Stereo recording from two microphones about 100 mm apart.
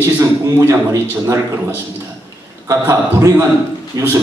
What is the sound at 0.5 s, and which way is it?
Speech, 30° right (ahead or behind).